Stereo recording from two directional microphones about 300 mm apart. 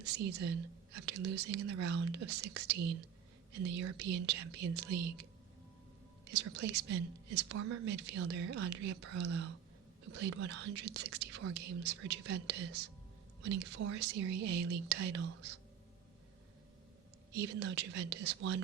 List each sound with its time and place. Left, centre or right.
0.2 s speech: right
6.3 s speech: right
17.3 s speech: right